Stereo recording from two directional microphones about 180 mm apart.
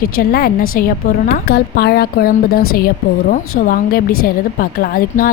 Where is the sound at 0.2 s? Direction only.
55° left (ahead or behind).